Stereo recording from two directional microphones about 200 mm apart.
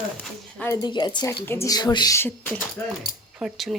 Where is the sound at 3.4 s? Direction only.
Centre (ahead or behind).